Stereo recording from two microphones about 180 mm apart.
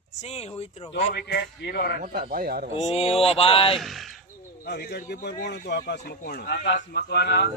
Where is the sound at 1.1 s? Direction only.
65° left (ahead or behind).